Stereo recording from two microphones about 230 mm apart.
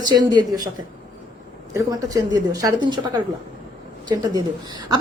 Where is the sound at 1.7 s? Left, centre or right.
Centre.